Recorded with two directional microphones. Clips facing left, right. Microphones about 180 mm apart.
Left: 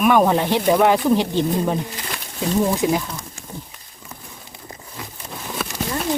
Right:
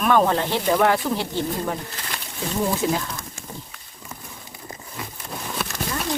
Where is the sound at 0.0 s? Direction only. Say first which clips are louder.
Left 3 dB; 10° left (ahead or behind).